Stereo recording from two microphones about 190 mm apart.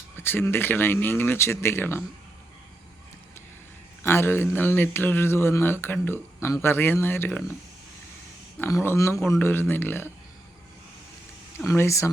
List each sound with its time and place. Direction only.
0.2 s speech: 10° left (ahead or behind)
4.0 s speech: 10° left (ahead or behind)
8.5 s speech: 10° left (ahead or behind)
11.7 s speech: 15° left (ahead or behind)